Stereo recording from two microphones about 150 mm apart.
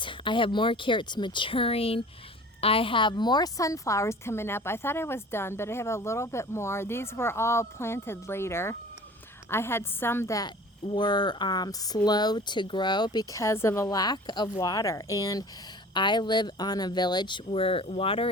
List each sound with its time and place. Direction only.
0.0 s a woman's voice: 35° left (ahead or behind)